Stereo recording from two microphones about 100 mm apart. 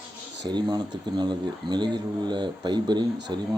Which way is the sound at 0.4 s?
45° right (ahead or behind).